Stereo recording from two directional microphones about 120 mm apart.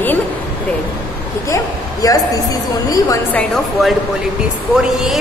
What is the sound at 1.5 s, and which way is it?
Speech, 30° left (ahead or behind).